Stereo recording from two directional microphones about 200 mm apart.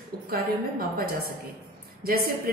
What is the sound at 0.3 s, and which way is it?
Speech, 50° right (ahead or behind).